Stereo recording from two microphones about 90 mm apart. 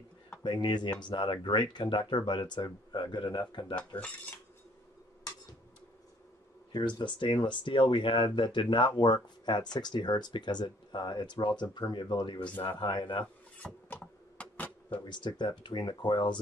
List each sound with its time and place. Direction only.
0.4 s speech: 60° left (ahead or behind)
3.7 s cutlery: 15° left (ahead or behind)
7.0 s speech: 65° left (ahead or behind)
13.6 s a sound: 15° left (ahead or behind)
15.0 s speech: 60° left (ahead or behind)